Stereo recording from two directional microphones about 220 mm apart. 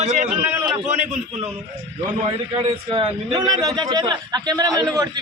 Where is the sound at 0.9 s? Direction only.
30° right (ahead or behind).